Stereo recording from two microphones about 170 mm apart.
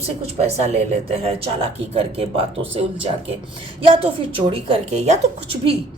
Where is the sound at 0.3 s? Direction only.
40° right (ahead or behind).